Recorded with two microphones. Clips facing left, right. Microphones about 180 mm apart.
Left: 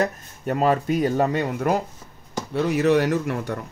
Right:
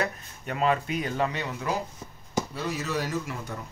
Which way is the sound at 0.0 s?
45° left (ahead or behind).